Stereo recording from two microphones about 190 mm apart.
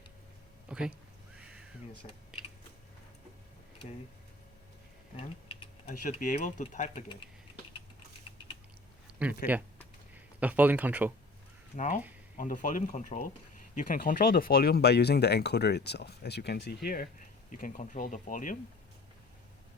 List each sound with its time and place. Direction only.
0.7 s speech: 5° right (ahead or behind)
1.4 s a sound: 5° right (ahead or behind)
5.1 s speech: 30° left (ahead or behind)
5.9 s speech: 45° left (ahead or behind)
9.4 s speech: 50° left (ahead or behind)
10.4 s speech: 10° right (ahead or behind)
12.4 s speech: 45° left (ahead or behind)